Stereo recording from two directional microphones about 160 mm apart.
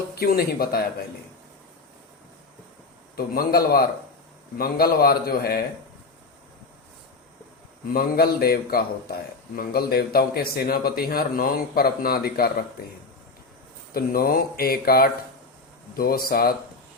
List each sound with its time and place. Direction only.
0.2 s a man's voice: 70° left (ahead or behind)
3.2 s a man's voice: 70° left (ahead or behind)
7.9 s a man's voice: 70° left (ahead or behind)
13.9 s a man's voice: 70° left (ahead or behind)